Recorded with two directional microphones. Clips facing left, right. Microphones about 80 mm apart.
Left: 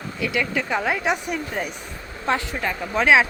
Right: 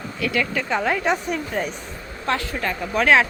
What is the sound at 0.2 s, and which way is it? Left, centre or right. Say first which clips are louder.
Speech: right 1 dB; centre.